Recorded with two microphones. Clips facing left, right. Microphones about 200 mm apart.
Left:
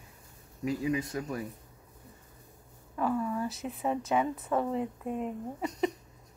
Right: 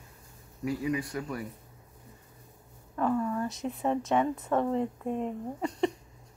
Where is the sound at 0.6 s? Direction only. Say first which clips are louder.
Even; 20° left (ahead or behind).